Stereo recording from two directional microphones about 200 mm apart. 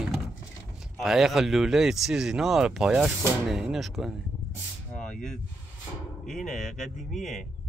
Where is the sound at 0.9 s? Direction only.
Centre (ahead or behind).